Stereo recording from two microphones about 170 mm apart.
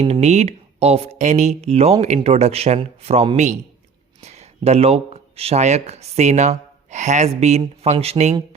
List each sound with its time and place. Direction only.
0.0 s speech: 40° right (ahead or behind)